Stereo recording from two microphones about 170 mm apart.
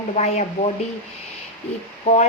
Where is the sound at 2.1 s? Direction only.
35° left (ahead or behind).